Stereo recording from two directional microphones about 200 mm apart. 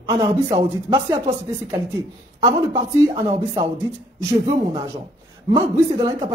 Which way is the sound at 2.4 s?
20° right (ahead or behind).